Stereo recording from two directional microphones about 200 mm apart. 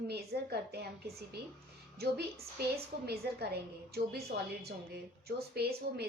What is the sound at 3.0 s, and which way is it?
A woman's voice, 55° right (ahead or behind).